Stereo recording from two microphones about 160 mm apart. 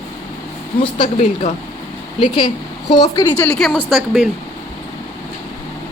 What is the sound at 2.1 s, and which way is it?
Speech, 30° left (ahead or behind).